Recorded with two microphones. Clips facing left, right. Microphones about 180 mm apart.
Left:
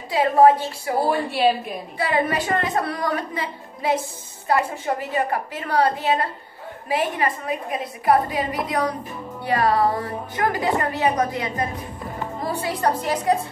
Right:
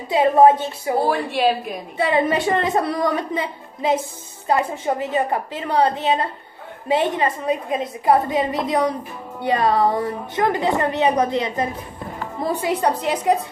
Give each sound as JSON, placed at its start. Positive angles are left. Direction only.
{"t": 0.1, "sound": "a woman's voice", "side_deg": -25}
{"t": 1.0, "sound": "speech", "side_deg": 0}
{"t": 2.0, "sound": "a woman's voice", "side_deg": -20}